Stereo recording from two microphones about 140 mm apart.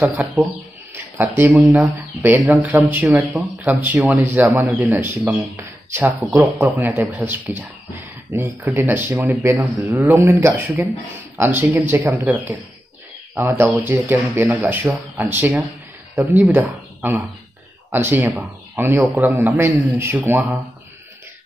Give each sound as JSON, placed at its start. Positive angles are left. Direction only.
{"t": 0.2, "sound": "speech", "side_deg": -10}
{"t": 0.9, "sound": "a sound", "side_deg": -15}
{"t": 1.6, "sound": "speech", "side_deg": -10}
{"t": 16.3, "sound": "speech", "side_deg": -10}